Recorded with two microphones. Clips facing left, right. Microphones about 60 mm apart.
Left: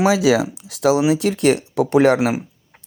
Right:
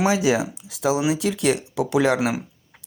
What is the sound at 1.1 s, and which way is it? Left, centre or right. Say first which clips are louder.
Speech: left 5 dB; left.